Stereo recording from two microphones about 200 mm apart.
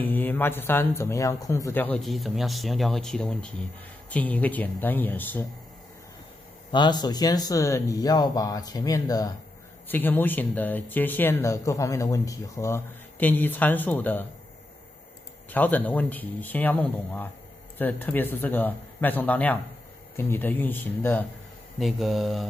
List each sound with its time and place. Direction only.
0.0 s speech: 10° left (ahead or behind)
6.7 s speech: 20° left (ahead or behind)
15.5 s speech: 10° left (ahead or behind)